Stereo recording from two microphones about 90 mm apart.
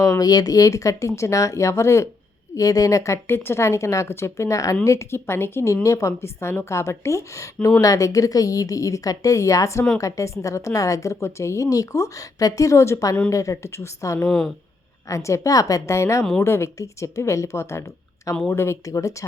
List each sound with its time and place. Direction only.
0.0 s speech: 40° left (ahead or behind)
14.3 s speech: centre (ahead or behind)
15.1 s speech: 35° left (ahead or behind)